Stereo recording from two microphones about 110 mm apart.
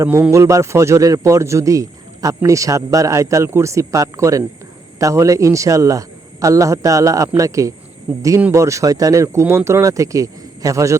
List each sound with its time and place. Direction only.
0.0 s a man's voice: 25° right (ahead or behind)